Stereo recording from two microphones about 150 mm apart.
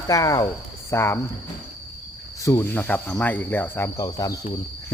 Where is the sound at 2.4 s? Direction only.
20° left (ahead or behind).